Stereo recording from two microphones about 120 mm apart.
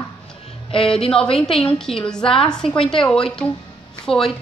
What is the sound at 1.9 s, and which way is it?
Speech, 55° left (ahead or behind).